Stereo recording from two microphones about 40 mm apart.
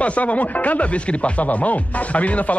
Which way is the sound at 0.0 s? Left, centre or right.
Left.